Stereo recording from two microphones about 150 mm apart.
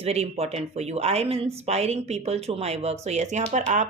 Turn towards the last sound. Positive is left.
turn(degrees=-50)  # may be behind; listen again after turning